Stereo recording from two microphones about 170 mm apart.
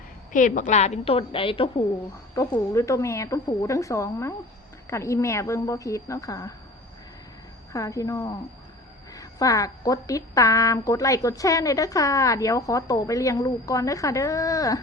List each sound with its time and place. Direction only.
0.3 s a woman's voice: 50° left (ahead or behind); by 1.8 s 30° left (ahead or behind)
2.3 s a woman's voice: 20° left (ahead or behind)
7.7 s a woman's voice: 20° left (ahead or behind)